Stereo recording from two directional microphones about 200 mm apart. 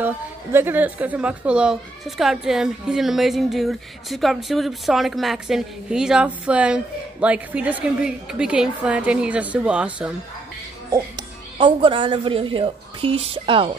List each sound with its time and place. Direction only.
0.0 s a woman's voice: 10° right (ahead or behind)
10.9 s speech: 20° right (ahead or behind)